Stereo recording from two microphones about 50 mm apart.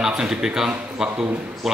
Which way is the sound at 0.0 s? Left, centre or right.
Centre.